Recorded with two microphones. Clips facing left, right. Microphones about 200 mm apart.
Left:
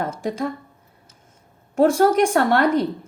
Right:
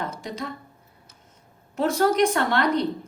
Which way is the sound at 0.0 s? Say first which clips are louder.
Left 7 dB; 50° left (ahead or behind).